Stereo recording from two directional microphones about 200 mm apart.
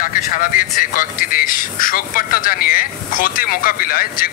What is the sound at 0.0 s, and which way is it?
Speech, 45° left (ahead or behind).